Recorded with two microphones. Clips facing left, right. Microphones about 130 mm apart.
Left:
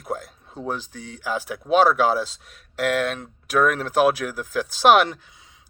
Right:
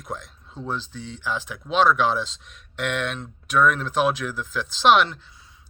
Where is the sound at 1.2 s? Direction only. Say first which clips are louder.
Left 3 dB; 45° left (ahead or behind).